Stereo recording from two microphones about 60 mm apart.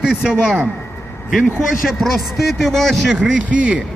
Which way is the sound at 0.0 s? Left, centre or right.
Centre.